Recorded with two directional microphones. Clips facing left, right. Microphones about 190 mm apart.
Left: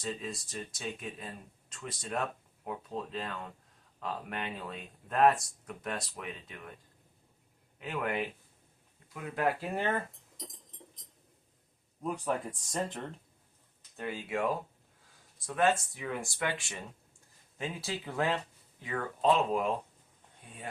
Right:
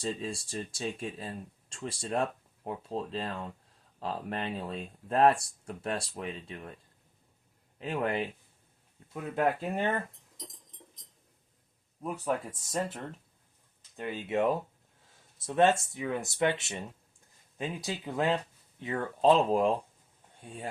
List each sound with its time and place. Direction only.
0.0 s speech: 30° right (ahead or behind)
7.8 s speech: 30° right (ahead or behind)
9.3 s speech: 20° right (ahead or behind)
10.1 s cutlery: centre (ahead or behind)
12.0 s speech: 5° right (ahead or behind)
13.9 s speech: 20° right (ahead or behind)